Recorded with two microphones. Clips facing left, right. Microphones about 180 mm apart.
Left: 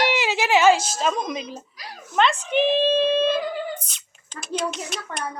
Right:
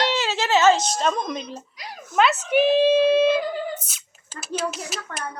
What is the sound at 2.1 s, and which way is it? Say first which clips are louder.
Speech: right 1 dB; 5° right (ahead or behind).